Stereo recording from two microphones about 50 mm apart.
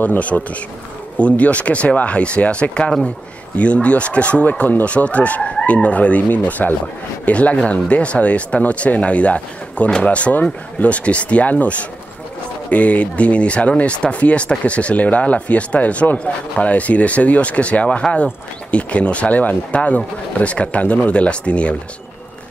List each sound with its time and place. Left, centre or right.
0.0 s speech: left